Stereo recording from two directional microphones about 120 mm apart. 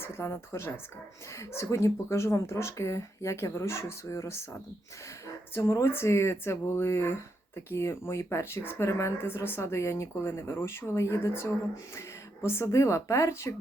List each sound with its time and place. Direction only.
0.0 s speech: 20° left (ahead or behind)
5.5 s speech: 20° left (ahead or behind)